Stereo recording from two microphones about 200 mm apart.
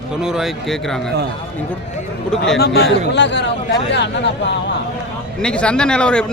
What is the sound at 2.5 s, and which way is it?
Speech, 55° left (ahead or behind).